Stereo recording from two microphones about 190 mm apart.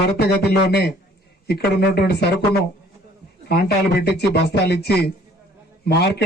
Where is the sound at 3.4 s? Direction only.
60° left (ahead or behind).